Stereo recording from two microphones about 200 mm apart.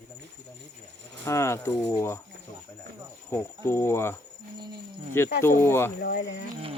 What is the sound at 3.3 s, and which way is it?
Speech, 10° left (ahead or behind).